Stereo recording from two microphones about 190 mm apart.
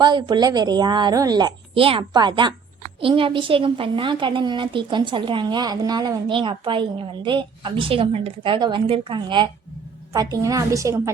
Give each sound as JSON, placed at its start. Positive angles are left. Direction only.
{"t": 0.0, "sound": "a woman's voice", "side_deg": -20}